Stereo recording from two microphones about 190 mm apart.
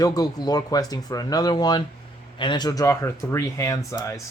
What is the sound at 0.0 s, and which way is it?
Speech, 20° left (ahead or behind).